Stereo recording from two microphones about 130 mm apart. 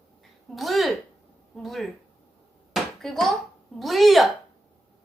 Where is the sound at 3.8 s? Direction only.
Centre (ahead or behind).